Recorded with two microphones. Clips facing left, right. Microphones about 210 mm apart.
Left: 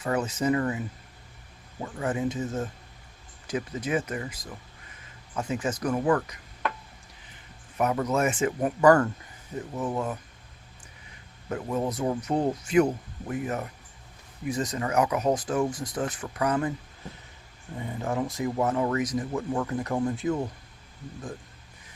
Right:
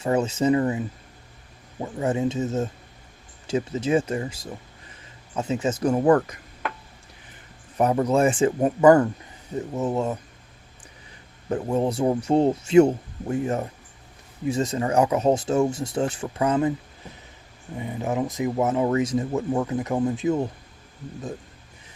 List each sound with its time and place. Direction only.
0.0 s speech: 25° right (ahead or behind)
6.1 s speech: 50° right (ahead or behind)
7.8 s speech: 30° right (ahead or behind)
11.4 s speech: 30° right (ahead or behind)
17.7 s speech: 15° right (ahead or behind)